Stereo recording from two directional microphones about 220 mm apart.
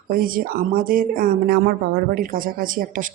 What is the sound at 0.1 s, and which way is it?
Speech, 40° right (ahead or behind).